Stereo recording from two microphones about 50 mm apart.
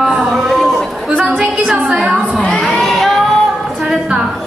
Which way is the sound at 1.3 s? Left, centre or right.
Centre.